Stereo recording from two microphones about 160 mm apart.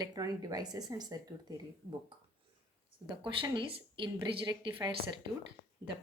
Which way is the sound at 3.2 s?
30° right (ahead or behind).